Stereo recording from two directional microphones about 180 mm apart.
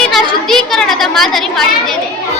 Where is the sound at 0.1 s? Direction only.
Centre (ahead or behind).